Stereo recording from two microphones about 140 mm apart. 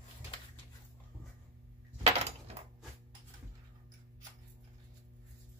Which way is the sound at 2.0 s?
50° right (ahead or behind).